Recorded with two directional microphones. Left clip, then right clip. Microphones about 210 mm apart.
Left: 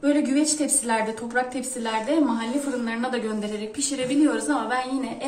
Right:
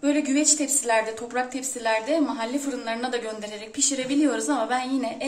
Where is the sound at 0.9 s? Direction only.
45° right (ahead or behind).